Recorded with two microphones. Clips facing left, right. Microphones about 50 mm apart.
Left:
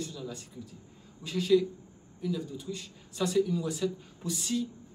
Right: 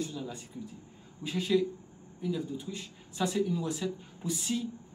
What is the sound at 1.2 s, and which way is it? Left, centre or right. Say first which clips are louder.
Speech: left 3 dB; centre.